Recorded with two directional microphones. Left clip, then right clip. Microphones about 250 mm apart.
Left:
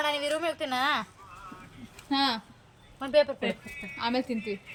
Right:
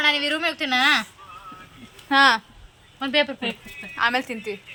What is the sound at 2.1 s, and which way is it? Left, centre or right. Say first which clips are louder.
Speech: right 11 dB; right.